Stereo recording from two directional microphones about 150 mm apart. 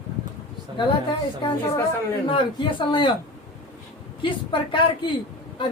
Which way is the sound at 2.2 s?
35° left (ahead or behind).